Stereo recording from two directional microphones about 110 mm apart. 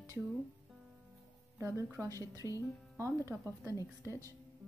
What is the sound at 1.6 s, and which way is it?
Speech, 25° right (ahead or behind).